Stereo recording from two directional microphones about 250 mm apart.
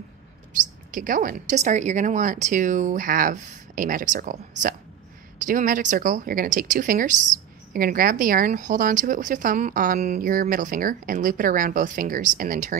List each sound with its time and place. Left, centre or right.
0.9 s speech: right